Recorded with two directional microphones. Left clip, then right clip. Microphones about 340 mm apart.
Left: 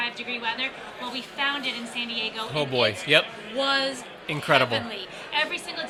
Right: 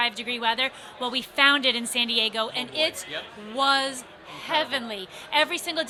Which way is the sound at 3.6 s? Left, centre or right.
Right.